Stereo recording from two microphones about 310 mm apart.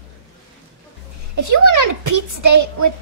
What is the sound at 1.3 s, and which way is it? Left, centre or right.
A woman's voice, right.